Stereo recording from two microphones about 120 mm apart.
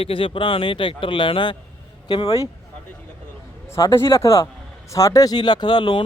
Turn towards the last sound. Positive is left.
turn(degrees=40)  # may be behind; listen again after turning